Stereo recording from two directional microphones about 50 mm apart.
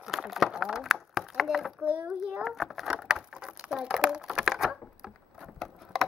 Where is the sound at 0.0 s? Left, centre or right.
Centre.